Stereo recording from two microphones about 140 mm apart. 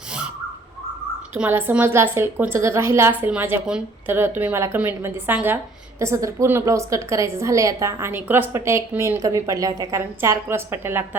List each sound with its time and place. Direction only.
1.3 s a woman's voice: 15° right (ahead or behind)